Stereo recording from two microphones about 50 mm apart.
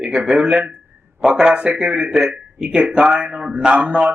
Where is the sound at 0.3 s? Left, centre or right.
Centre.